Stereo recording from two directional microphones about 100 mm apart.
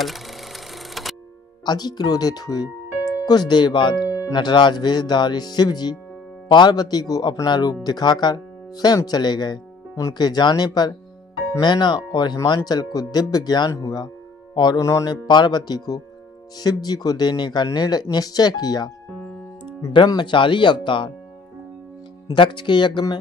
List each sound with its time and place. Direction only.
0.0 s a sound: centre (ahead or behind)
1.7 s speech: 45° left (ahead or behind)
14.8 s speech: 30° left (ahead or behind)
15.0 s speech: 45° left (ahead or behind)
20.1 s speech: 50° left (ahead or behind)
22.3 s speech: 50° left (ahead or behind)